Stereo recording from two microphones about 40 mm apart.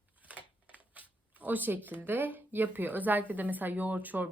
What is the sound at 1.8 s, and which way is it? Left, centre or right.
A woman's voice, right.